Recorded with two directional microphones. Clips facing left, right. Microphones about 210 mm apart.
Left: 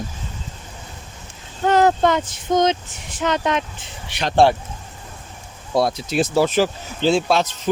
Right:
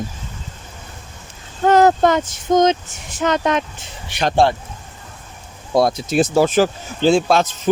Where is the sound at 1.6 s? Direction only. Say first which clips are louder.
Right 3 dB; 45° right (ahead or behind).